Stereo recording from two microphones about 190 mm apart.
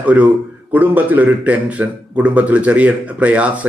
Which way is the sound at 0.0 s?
5° right (ahead or behind).